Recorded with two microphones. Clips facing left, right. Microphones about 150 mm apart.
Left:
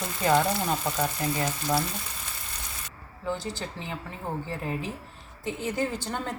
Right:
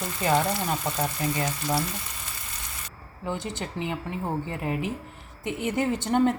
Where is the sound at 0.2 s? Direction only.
5° right (ahead or behind).